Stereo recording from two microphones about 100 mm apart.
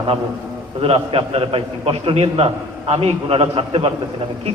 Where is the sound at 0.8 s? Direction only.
70° right (ahead or behind).